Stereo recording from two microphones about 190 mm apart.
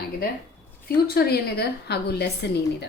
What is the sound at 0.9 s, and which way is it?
A woman's voice, 55° left (ahead or behind).